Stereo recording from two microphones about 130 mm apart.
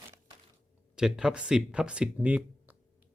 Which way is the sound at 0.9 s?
5° right (ahead or behind).